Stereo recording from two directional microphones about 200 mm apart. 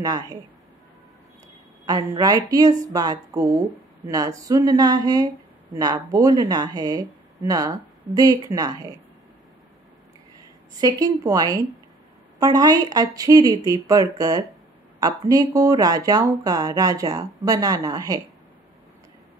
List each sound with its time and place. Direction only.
1.9 s a woman's voice: 20° right (ahead or behind)
10.8 s a woman's voice: 20° right (ahead or behind)